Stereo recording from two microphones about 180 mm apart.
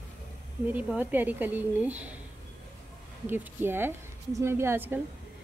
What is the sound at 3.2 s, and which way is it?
Speech, 10° right (ahead or behind).